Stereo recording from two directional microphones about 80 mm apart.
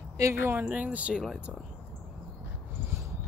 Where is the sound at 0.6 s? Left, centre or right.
Centre.